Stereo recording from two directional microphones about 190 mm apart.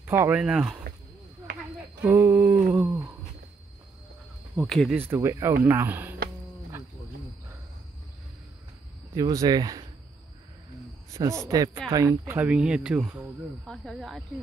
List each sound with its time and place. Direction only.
0.0 s speech: 10° right (ahead or behind)
2.0 s a sound: 10° right (ahead or behind)
4.6 s speech: centre (ahead or behind)
4.9 s speech: 10° right (ahead or behind)
9.1 s speech: 20° right (ahead or behind)
11.1 s speech: 15° right (ahead or behind); by 14.2 s centre (ahead or behind)